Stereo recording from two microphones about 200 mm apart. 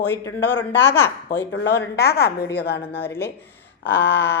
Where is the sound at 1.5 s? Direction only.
60° left (ahead or behind).